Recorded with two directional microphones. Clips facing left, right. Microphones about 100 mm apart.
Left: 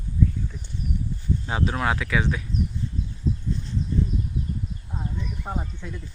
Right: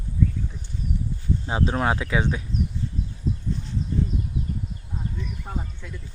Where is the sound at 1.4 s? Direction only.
25° right (ahead or behind).